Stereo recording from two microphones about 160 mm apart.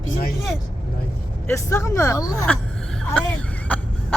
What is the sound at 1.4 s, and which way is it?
Speech, 15° left (ahead or behind).